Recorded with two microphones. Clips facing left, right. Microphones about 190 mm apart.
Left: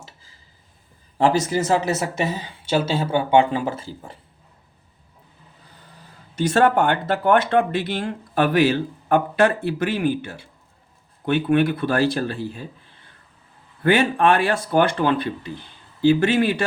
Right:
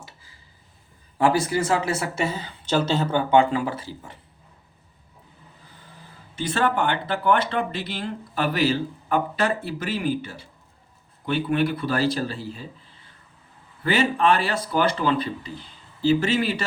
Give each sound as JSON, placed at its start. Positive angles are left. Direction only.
{"t": 1.3, "sound": "speech", "side_deg": 20}
{"t": 6.5, "sound": "speech", "side_deg": 45}
{"t": 13.8, "sound": "speech", "side_deg": 55}